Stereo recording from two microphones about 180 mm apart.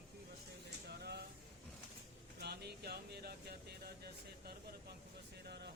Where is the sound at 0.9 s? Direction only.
65° right (ahead or behind).